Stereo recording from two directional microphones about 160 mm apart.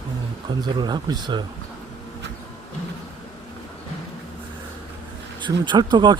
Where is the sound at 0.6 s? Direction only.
25° right (ahead or behind).